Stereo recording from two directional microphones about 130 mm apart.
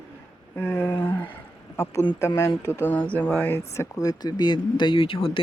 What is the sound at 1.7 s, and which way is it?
Speech, 15° left (ahead or behind).